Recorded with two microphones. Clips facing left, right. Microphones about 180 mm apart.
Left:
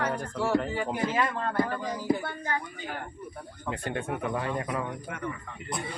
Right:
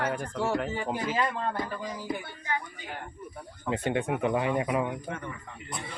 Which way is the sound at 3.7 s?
20° right (ahead or behind).